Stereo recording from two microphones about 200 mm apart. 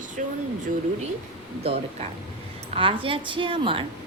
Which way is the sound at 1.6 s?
30° right (ahead or behind).